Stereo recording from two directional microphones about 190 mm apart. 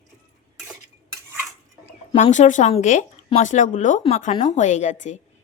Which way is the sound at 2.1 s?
35° left (ahead or behind).